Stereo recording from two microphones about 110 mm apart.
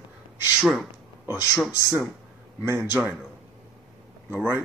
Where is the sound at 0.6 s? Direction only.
Centre (ahead or behind).